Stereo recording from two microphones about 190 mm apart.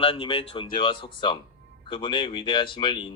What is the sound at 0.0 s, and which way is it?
Speech, 30° left (ahead or behind).